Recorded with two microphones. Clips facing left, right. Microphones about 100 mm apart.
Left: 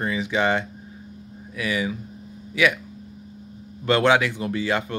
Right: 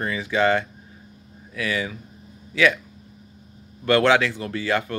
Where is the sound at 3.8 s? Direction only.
20° left (ahead or behind).